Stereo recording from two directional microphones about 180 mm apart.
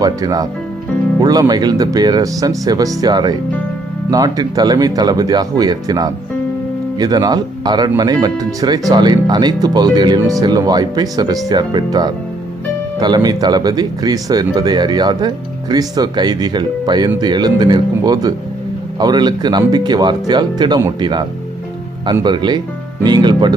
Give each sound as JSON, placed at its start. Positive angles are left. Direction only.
{"t": 0.0, "sound": "speech", "side_deg": -20}